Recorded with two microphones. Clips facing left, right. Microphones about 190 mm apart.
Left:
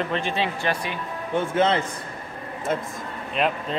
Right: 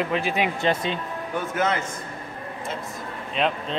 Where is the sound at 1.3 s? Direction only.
30° left (ahead or behind).